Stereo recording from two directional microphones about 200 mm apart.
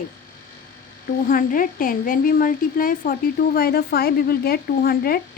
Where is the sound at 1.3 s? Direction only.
45° left (ahead or behind).